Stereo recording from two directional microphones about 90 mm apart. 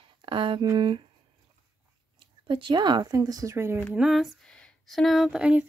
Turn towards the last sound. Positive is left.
turn(degrees=-10)  # may be behind; listen again after turning